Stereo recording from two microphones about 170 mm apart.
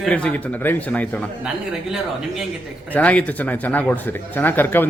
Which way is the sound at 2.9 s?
10° left (ahead or behind).